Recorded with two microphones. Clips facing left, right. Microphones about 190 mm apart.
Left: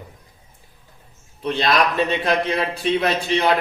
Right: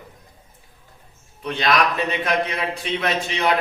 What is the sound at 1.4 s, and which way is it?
Speech, 30° left (ahead or behind).